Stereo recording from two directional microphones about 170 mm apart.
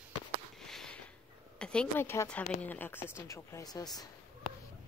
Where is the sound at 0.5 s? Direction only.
Centre (ahead or behind).